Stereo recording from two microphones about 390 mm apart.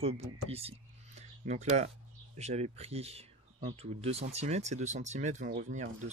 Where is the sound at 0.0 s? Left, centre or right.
Centre.